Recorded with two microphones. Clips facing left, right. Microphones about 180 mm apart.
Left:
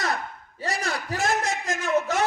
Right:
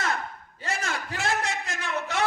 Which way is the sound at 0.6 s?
35° left (ahead or behind).